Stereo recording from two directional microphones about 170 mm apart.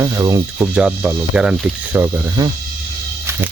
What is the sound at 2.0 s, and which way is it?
Speech, 20° right (ahead or behind).